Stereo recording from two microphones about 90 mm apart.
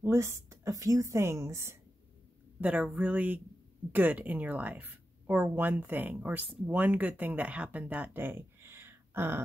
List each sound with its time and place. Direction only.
0.0 s a woman's voice: 30° right (ahead or behind)
2.6 s a woman's voice: 15° right (ahead or behind)